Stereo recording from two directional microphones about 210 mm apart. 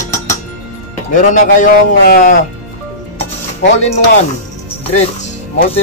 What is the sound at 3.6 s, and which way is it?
Speech, 30° left (ahead or behind).